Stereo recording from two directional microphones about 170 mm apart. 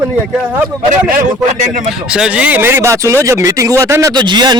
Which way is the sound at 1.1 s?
55° right (ahead or behind).